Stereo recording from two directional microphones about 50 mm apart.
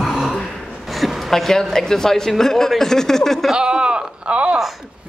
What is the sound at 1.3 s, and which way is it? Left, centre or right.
A woman's voice, centre.